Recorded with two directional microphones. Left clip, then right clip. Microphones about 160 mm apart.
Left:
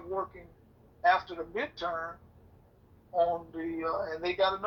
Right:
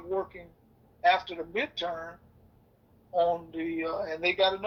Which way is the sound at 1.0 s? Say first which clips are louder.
Right 1 dB; 35° right (ahead or behind).